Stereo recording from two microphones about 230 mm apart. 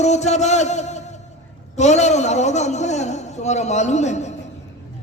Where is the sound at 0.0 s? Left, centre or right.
Left.